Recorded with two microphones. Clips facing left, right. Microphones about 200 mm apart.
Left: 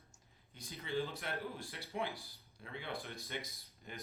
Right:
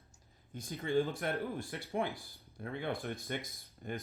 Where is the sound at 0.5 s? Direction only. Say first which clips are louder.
Right 7 dB; 50° right (ahead or behind).